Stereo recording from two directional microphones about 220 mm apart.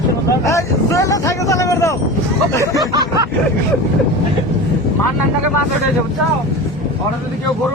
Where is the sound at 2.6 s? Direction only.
15° right (ahead or behind).